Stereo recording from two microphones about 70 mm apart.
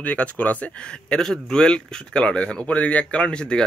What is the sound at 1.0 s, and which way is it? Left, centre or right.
Speech, centre.